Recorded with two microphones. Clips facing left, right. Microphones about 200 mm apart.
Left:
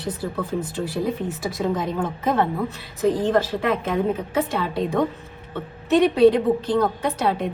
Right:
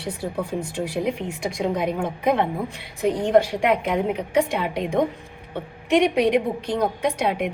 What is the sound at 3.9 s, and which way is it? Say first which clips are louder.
A woman's voice: right 1 dB; 15° right (ahead or behind).